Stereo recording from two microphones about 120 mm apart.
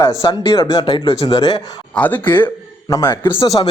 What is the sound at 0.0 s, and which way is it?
A man's voice, 25° left (ahead or behind).